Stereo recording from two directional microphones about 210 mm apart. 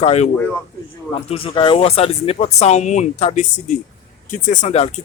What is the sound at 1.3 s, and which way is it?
Speech, 25° left (ahead or behind).